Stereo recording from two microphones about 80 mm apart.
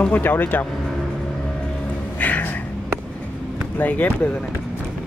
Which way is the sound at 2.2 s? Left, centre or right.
Left.